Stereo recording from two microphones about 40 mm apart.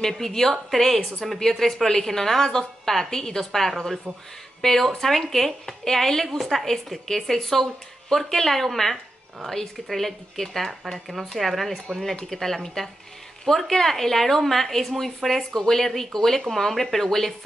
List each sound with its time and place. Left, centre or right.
0.0 s speech: centre